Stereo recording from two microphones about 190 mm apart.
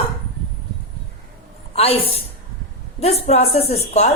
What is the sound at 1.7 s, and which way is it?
A woman's voice, 30° left (ahead or behind).